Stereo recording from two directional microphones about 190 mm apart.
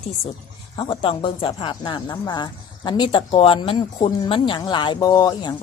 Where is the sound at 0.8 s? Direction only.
25° left (ahead or behind).